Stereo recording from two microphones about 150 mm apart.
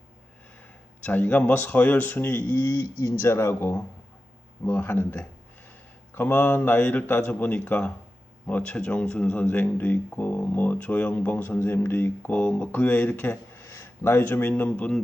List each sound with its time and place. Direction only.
1.0 s speech: 10° left (ahead or behind)